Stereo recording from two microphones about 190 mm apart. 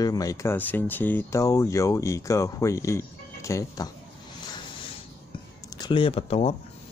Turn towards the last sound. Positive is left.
turn(degrees=30)  # may be behind; listen again after turning